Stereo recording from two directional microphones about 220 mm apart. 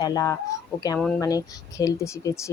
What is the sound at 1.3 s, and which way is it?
Speech, 15° left (ahead or behind).